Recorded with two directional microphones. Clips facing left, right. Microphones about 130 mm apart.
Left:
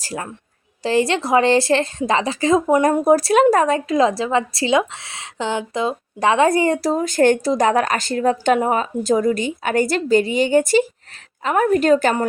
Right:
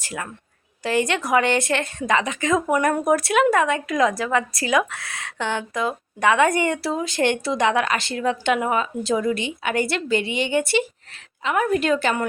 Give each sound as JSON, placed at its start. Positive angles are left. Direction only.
{"t": 0.0, "sound": "a woman's voice", "side_deg": 35}